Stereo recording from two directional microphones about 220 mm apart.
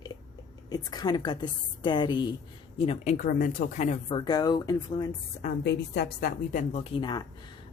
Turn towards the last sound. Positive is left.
turn(degrees=20)  # may be behind; listen again after turning